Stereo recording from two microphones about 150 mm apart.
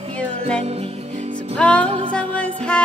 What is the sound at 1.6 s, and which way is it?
Music, 10° left (ahead or behind).